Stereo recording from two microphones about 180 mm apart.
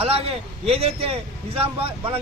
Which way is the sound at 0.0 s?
30° right (ahead or behind).